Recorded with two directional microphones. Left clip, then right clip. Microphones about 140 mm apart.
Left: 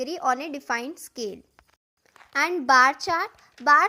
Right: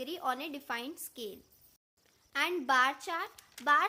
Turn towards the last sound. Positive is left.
turn(degrees=40)  # may be behind; listen again after turning